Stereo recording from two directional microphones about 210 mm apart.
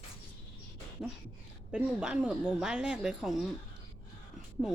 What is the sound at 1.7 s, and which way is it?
Speech, 5° right (ahead or behind).